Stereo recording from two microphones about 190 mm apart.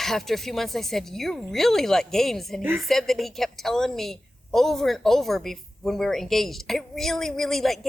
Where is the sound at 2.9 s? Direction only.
Centre (ahead or behind).